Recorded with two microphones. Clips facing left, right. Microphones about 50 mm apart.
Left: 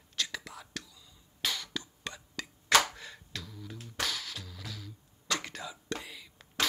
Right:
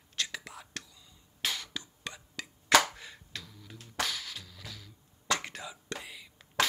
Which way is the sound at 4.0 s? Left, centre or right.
Centre.